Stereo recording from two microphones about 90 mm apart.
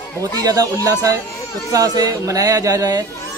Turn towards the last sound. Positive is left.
turn(degrees=-40)  # may be behind; listen again after turning